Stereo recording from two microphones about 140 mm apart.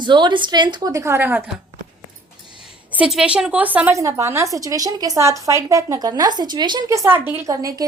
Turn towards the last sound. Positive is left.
turn(degrees=-25)  # may be behind; listen again after turning